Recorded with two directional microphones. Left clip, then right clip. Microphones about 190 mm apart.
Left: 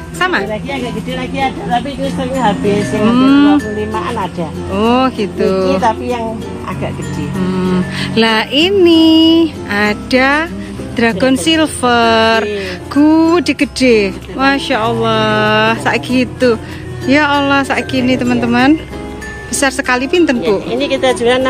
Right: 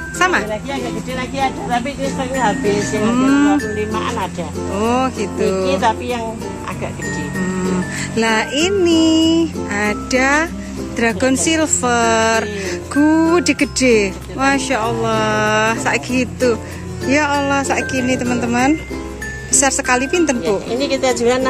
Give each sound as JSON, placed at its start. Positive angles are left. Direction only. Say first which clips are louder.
{"t": 0.2, "sound": "a woman's voice", "louder": "left 1 dB", "side_deg": -5}
{"t": 3.0, "sound": "speech", "louder": "left 7 dB", "side_deg": 0}
{"t": 4.7, "sound": "speech", "louder": "left 5 dB", "side_deg": 0}
{"t": 7.5, "sound": "a woman's voice", "louder": "left 6 dB", "side_deg": 0}
{"t": 20.7, "sound": "speech", "louder": "left 4 dB", "side_deg": -60}